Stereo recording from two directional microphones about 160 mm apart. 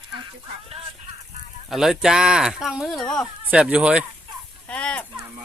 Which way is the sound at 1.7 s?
5° right (ahead or behind).